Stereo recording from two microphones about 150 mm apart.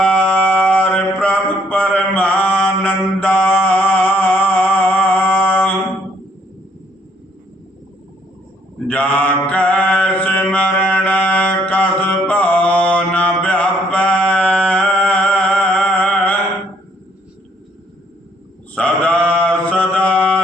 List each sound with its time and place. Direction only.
0.0 s mantra: 10° left (ahead or behind)
8.9 s mantra: 10° left (ahead or behind)
18.7 s mantra: 10° left (ahead or behind)